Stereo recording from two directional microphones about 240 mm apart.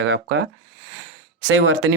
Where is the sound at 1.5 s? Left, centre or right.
Right.